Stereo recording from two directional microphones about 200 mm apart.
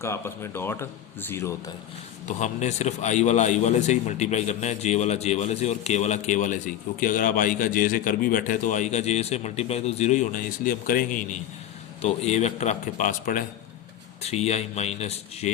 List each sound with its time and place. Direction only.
0.0 s speech: 15° left (ahead or behind)
2.2 s a man's voice: 35° left (ahead or behind)